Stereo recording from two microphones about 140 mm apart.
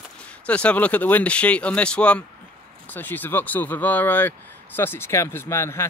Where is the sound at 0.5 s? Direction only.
10° left (ahead or behind).